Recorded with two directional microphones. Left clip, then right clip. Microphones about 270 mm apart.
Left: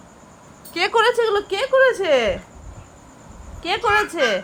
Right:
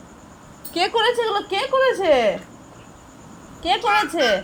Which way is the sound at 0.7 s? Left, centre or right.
Centre.